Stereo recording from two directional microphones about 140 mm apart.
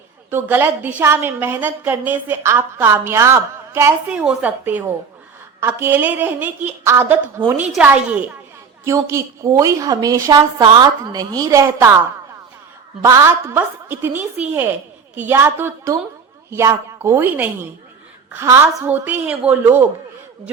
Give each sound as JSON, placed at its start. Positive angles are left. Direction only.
{"t": 0.3, "sound": "a woman's voice", "side_deg": -15}
{"t": 8.8, "sound": "a woman's voice", "side_deg": -20}
{"t": 13.0, "sound": "a woman's voice", "side_deg": -20}